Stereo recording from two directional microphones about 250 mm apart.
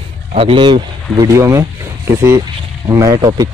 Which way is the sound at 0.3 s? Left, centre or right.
Right.